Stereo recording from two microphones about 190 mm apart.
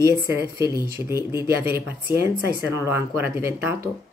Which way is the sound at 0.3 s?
15° right (ahead or behind).